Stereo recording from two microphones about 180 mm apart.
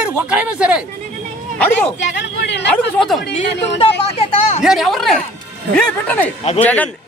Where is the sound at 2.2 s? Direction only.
70° left (ahead or behind).